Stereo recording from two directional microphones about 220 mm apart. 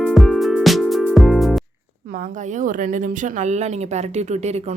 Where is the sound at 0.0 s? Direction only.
Centre (ahead or behind).